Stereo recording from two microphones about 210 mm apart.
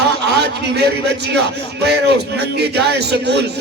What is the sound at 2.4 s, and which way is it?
Speech, 50° right (ahead or behind).